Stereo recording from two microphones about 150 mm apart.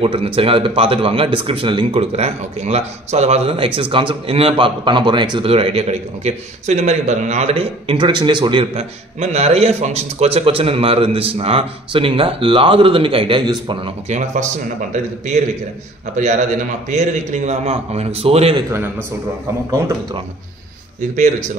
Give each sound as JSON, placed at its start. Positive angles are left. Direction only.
{"t": 0.0, "sound": "speech", "side_deg": -40}
{"t": 14.1, "sound": "a man's voice", "side_deg": -50}
{"t": 16.2, "sound": "a man's voice", "side_deg": -55}
{"t": 19.7, "sound": "speech", "side_deg": -20}